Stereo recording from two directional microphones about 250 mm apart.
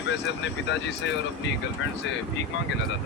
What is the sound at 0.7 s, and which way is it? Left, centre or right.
Speech, left.